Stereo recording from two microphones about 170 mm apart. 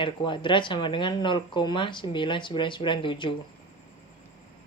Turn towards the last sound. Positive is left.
turn(degrees=30)  # may be behind; listen again after turning